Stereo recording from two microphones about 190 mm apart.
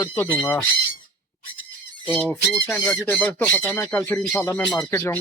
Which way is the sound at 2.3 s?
5° left (ahead or behind).